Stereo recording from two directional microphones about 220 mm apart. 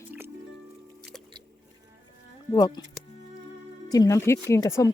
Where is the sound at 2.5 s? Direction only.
20° left (ahead or behind).